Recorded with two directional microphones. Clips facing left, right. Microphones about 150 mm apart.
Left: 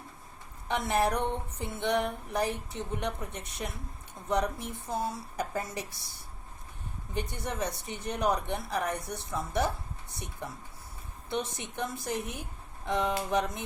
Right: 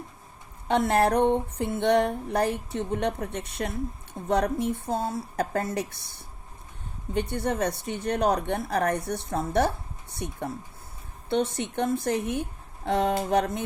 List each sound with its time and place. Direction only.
0.7 s speech: 60° right (ahead or behind)
7.1 s speech: 60° right (ahead or behind)
11.3 s speech: 65° right (ahead or behind)